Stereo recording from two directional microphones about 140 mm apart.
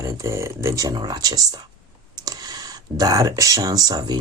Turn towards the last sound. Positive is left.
turn(degrees=-25)  # may be behind; listen again after turning